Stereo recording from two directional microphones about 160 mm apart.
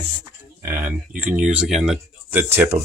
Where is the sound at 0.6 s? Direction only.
10° right (ahead or behind).